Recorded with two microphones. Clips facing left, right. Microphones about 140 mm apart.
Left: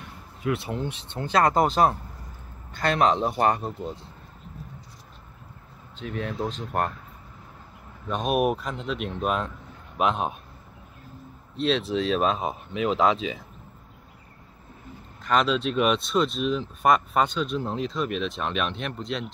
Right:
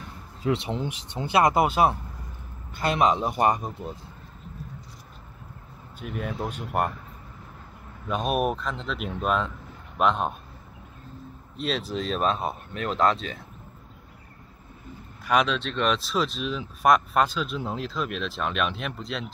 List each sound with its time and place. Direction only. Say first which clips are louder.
0.4 s speech: right 1 dB; 25° right (ahead or behind)
5.9 s speech: left 1 dB; 5° right (ahead or behind)
8.1 s speech: left 2 dB; centre (ahead or behind)
11.5 s speech: left 4 dB; centre (ahead or behind)
15.4 s speech: left 3 dB; 5° left (ahead or behind)